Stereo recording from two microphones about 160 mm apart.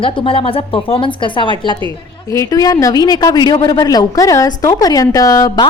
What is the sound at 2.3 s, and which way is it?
A man's voice, 20° left (ahead or behind).